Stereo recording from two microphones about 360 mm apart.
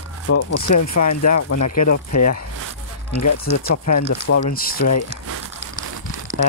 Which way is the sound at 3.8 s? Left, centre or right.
Left.